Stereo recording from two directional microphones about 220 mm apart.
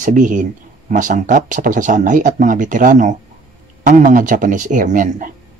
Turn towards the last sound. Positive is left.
turn(degrees=-35)  # may be behind; listen again after turning